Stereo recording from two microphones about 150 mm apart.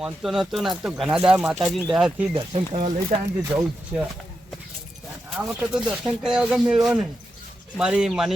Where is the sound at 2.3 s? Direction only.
35° right (ahead or behind).